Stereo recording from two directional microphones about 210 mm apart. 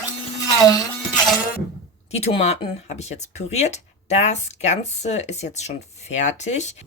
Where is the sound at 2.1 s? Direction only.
30° left (ahead or behind).